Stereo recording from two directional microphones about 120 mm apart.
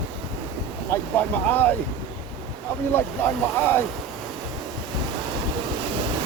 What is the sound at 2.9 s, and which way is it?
Speech, 20° left (ahead or behind).